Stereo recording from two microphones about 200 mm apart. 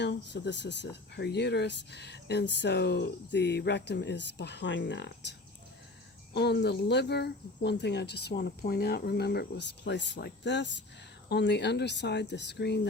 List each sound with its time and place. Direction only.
0.0 s speech: 60° left (ahead or behind)
6.3 s speech: 55° left (ahead or behind)